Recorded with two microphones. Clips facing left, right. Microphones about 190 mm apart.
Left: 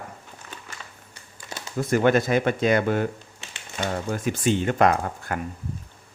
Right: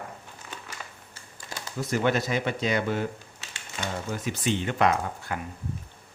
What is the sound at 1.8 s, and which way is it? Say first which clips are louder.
Speech: left 6 dB; 50° left (ahead or behind).